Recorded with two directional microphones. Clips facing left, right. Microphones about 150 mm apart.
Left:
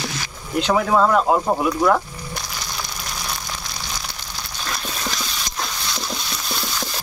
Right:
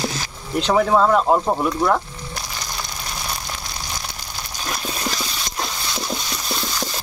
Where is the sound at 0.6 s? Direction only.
Centre (ahead or behind).